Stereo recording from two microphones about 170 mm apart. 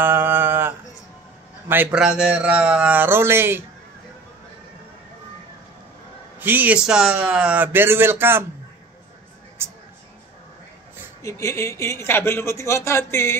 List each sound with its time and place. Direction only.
0.0 s a sound: 10° right (ahead or behind)
1.7 s speech: 10° right (ahead or behind)
6.4 s speech: 10° right (ahead or behind)
11.2 s speech: 20° left (ahead or behind)